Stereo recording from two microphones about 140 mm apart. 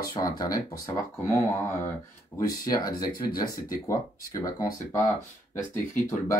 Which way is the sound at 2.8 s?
30° left (ahead or behind).